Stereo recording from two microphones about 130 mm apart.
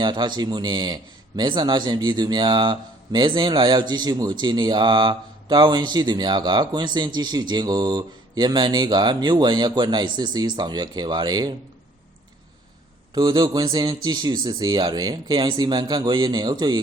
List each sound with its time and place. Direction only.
0.0 s speech: 35° right (ahead or behind)
13.1 s speech: 30° right (ahead or behind)